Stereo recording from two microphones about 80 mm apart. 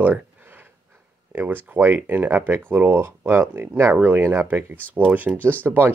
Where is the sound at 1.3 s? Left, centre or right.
Right.